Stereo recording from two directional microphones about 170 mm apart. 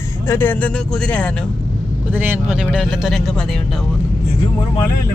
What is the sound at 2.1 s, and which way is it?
Speech, 10° right (ahead or behind).